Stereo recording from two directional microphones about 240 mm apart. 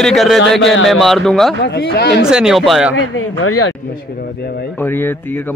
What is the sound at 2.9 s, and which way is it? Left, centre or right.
Speech, left.